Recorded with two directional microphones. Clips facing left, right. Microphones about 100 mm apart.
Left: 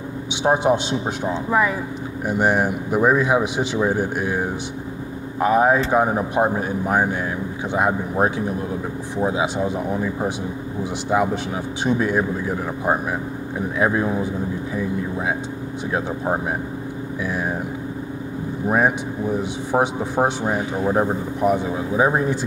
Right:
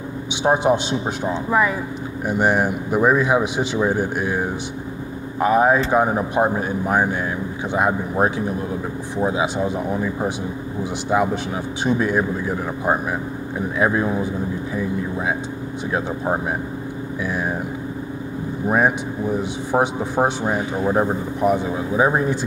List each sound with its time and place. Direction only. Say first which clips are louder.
0.4 s speech: right 1 dB; 25° right (ahead or behind)
5.4 s speech: right 1 dB; 20° right (ahead or behind)
11.1 s speech: right 1 dB; 10° right (ahead or behind)
16.3 s speech: even; 20° right (ahead or behind)
18.7 s speech: right 1 dB; 20° right (ahead or behind)